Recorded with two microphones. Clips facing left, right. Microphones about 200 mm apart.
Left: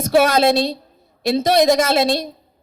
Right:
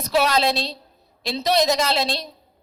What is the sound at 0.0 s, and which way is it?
A woman's voice, 50° left (ahead or behind).